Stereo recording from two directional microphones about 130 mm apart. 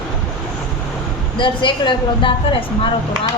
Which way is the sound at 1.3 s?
40° left (ahead or behind).